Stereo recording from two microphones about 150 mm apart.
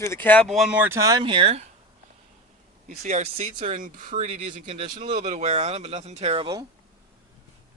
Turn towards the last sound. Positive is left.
turn(degrees=-40)  # may be behind; listen again after turning